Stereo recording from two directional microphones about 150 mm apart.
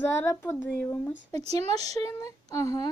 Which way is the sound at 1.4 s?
45° right (ahead or behind).